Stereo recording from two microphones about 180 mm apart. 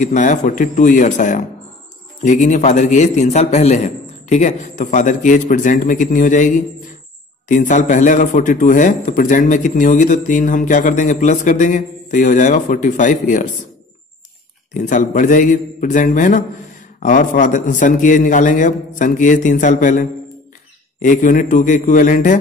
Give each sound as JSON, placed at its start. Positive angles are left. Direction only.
{"t": 0.0, "sound": "a man's voice", "side_deg": 45}
{"t": 14.7, "sound": "speech", "side_deg": 45}